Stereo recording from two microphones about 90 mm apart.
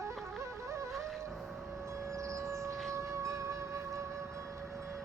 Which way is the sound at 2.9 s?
30° right (ahead or behind).